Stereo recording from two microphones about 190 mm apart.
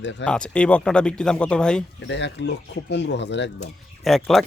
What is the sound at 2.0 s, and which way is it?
Speech, 65° left (ahead or behind).